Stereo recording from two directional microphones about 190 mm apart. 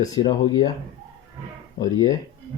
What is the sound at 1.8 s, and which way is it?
Speech, 20° left (ahead or behind).